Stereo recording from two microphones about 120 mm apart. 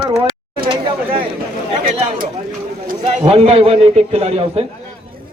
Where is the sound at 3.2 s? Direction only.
55° right (ahead or behind).